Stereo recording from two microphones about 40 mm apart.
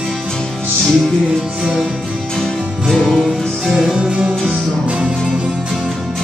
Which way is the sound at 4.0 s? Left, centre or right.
Right.